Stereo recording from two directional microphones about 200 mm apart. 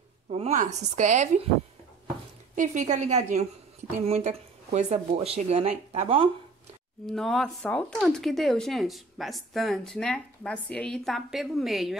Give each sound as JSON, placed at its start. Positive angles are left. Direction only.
{"t": 0.3, "sound": "speech", "side_deg": -30}
{"t": 2.5, "sound": "speech", "side_deg": -40}
{"t": 7.1, "sound": "speech", "side_deg": 0}